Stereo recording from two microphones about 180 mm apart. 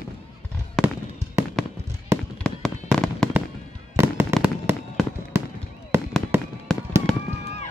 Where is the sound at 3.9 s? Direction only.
15° right (ahead or behind).